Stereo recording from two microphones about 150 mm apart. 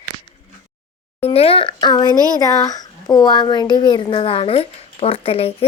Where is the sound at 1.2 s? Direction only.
40° left (ahead or behind).